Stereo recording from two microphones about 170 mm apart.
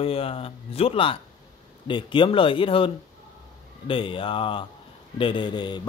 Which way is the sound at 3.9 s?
30° left (ahead or behind).